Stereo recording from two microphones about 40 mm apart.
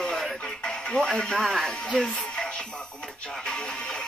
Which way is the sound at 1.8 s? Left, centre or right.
Centre.